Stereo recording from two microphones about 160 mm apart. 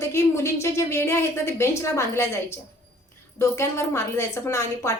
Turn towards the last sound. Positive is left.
turn(degrees=15)  # may be behind; listen again after turning